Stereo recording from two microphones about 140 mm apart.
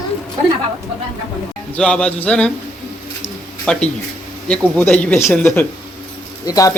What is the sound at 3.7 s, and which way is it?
Speech, 5° left (ahead or behind).